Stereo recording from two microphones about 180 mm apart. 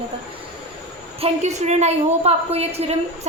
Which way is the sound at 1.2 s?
40° right (ahead or behind).